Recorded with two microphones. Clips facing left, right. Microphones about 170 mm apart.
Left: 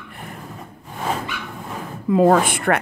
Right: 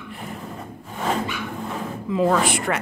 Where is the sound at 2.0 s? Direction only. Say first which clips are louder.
Left 5 dB; 50° left (ahead or behind).